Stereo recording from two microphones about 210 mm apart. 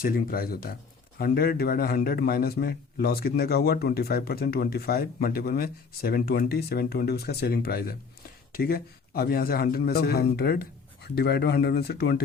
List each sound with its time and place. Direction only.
0.0 s a man's voice: 45° left (ahead or behind)